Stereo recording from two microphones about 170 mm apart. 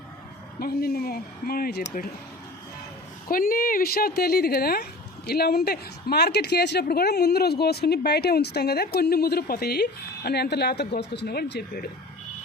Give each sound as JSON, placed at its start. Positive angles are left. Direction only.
{"t": 0.6, "sound": "speech", "side_deg": 65}
{"t": 3.2, "sound": "speech", "side_deg": 55}